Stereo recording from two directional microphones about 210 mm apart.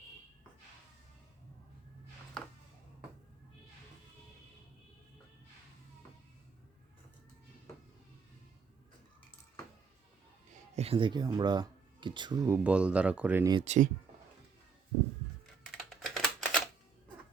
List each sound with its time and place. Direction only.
10.8 s speech: 25° right (ahead or behind)
13.7 s speech: 35° right (ahead or behind)
15.8 s typing: centre (ahead or behind)